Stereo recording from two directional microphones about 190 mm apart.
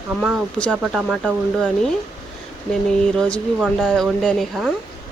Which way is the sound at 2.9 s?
5° left (ahead or behind).